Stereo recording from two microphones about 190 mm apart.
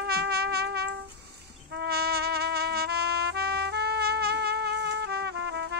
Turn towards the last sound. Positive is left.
turn(degrees=-65)  # may be behind; listen again after turning